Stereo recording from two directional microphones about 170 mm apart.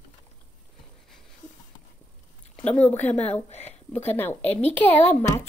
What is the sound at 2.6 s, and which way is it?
Speech, 10° left (ahead or behind).